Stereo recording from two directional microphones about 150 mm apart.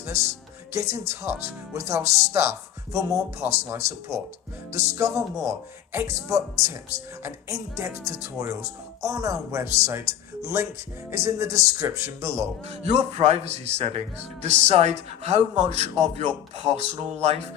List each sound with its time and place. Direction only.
0.7 s speech: 20° right (ahead or behind)
2.0 s speech: 50° right (ahead or behind)
2.3 s speech: 15° right (ahead or behind)
12.6 s speech: 45° right (ahead or behind)